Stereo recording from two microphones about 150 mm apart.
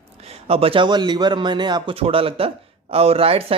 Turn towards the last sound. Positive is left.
turn(degrees=-40)  # may be behind; listen again after turning